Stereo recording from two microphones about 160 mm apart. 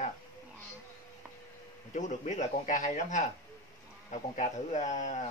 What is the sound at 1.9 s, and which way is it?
Speech, 50° left (ahead or behind).